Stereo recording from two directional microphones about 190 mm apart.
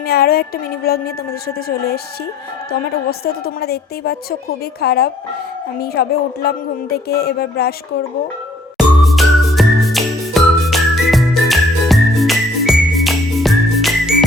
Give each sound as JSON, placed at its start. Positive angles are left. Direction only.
{"t": 0.0, "sound": "a sound", "side_deg": 55}
{"t": 3.1, "sound": "a woman's voice", "side_deg": 55}
{"t": 8.8, "sound": "music", "side_deg": 0}